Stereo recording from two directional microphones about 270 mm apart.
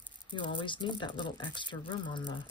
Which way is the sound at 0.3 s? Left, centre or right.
Centre.